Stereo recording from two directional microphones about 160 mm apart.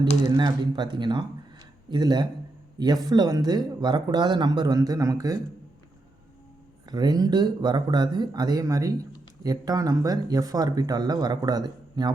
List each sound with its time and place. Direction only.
0.3 s speech: 25° right (ahead or behind)
6.9 s speech: 25° right (ahead or behind)